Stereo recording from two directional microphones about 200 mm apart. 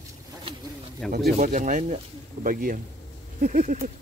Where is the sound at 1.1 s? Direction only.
45° right (ahead or behind).